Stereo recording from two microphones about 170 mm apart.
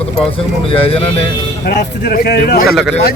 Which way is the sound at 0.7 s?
35° left (ahead or behind).